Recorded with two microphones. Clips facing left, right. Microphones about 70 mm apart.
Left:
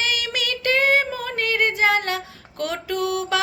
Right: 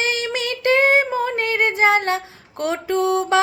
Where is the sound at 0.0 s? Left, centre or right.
Right.